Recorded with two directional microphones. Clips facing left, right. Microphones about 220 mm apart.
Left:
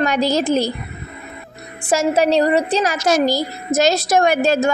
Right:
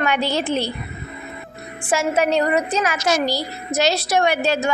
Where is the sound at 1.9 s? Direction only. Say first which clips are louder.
Left 3 dB; 40° left (ahead or behind).